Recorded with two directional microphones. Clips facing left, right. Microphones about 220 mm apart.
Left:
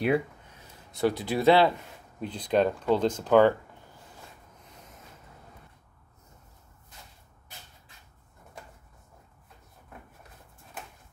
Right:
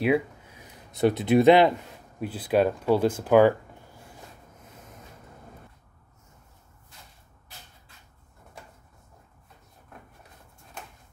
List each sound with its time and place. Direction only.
0.0 s a sound: centre (ahead or behind)
0.6 s speech: 20° right (ahead or behind)
2.1 s speech: 5° right (ahead or behind)